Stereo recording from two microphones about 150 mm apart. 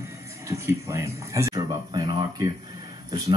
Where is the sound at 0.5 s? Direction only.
20° right (ahead or behind).